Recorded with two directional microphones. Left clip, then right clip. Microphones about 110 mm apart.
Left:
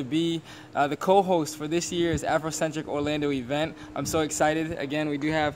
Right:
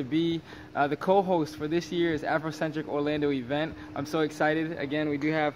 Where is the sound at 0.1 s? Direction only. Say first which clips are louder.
Left 1 dB; 20° left (ahead or behind).